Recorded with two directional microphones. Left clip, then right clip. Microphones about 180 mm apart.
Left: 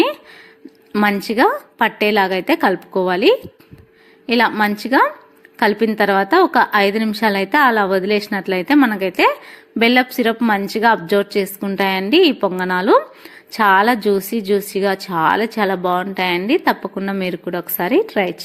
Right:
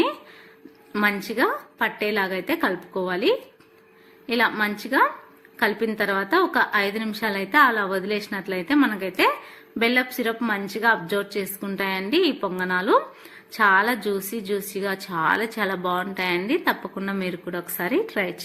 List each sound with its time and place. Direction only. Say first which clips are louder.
0.9 s a woman's voice: left 7 dB; 45° left (ahead or behind); by 18.4 s 30° left (ahead or behind)